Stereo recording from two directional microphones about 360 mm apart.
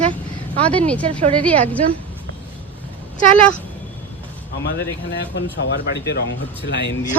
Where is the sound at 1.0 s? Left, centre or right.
Centre.